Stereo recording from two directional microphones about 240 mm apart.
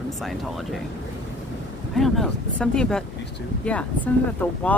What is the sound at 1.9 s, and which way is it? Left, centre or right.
Speech, centre.